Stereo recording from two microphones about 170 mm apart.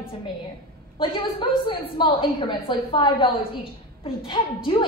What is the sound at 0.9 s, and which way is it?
A woman's voice, 30° left (ahead or behind).